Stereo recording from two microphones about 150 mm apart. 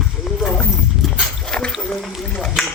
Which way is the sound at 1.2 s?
Centre (ahead or behind).